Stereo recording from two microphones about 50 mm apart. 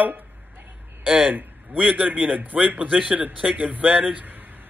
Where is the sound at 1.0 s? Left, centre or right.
Centre.